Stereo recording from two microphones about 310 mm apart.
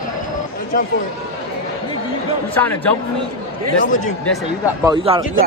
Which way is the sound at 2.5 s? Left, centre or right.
Centre.